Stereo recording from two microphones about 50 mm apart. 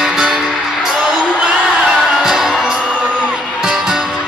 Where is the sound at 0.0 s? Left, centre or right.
Centre.